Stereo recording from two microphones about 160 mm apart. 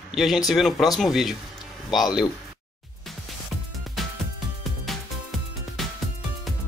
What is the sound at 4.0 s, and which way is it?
Music, centre (ahead or behind).